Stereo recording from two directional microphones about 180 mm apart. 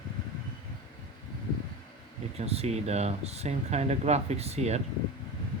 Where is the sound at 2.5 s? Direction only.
35° right (ahead or behind).